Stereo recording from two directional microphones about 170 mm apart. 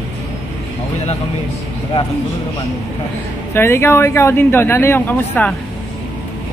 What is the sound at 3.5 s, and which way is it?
Speech, 15° left (ahead or behind).